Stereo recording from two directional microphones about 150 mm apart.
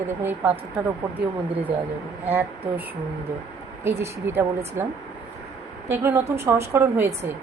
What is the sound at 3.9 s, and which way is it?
A woman's voice, 20° right (ahead or behind).